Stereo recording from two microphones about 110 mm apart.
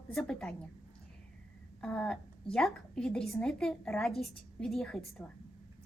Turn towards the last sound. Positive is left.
turn(degrees=0)  # may be behind; listen again after turning